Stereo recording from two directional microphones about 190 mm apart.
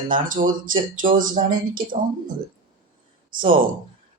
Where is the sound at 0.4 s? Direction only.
55° right (ahead or behind).